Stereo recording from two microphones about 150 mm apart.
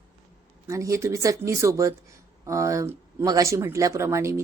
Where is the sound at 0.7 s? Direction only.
20° right (ahead or behind).